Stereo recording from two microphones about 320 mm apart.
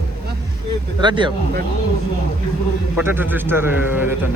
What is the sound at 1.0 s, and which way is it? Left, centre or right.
Speech, centre.